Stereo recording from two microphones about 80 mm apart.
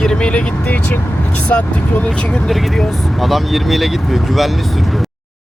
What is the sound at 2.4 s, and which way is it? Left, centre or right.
Speech, centre.